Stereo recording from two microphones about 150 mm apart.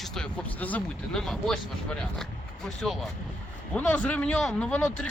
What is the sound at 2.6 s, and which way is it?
Speech, centre (ahead or behind).